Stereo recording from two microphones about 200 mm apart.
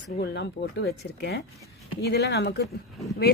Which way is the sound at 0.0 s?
60° left (ahead or behind).